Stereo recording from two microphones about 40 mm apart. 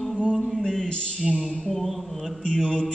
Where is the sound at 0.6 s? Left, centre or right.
Centre.